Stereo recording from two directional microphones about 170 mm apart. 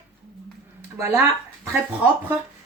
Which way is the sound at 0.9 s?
15° right (ahead or behind).